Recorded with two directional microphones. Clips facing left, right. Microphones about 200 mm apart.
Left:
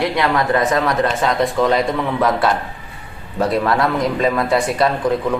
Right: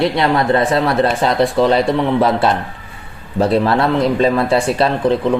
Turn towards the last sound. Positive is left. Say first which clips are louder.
# right 2 dB
turn(degrees=-30)  # may be behind; listen again after turning